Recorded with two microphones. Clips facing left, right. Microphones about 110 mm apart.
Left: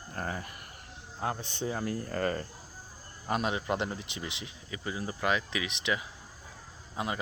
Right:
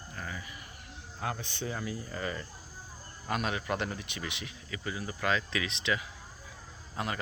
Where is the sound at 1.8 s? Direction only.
55° left (ahead or behind).